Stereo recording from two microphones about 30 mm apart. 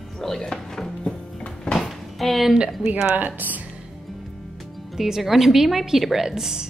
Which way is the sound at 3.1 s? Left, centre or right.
Right.